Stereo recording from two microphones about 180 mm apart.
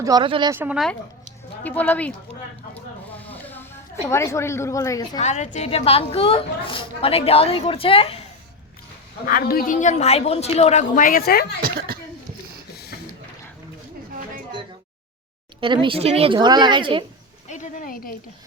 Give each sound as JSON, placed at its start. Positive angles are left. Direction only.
{"t": 0.0, "sound": "a woman's voice", "side_deg": -25}
{"t": 0.5, "sound": "speech", "side_deg": -10}
{"t": 1.6, "sound": "speech", "side_deg": 10}
{"t": 2.7, "sound": "snake", "side_deg": 10}
{"t": 4.1, "sound": "speech", "side_deg": 15}
{"t": 5.2, "sound": "a woman's voice", "side_deg": 40}
{"t": 9.2, "sound": "a woman's voice", "side_deg": 55}
{"t": 15.6, "sound": "a woman's voice", "side_deg": -25}
{"t": 17.5, "sound": "a woman's voice", "side_deg": 45}